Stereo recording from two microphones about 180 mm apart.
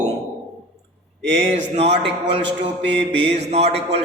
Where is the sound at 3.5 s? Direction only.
35° right (ahead or behind).